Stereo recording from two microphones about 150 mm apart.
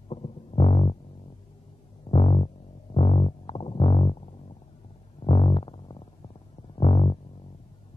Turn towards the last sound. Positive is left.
turn(degrees=40)  # may be behind; listen again after turning